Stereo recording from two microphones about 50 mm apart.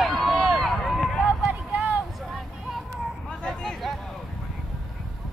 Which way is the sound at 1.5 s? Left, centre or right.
Right.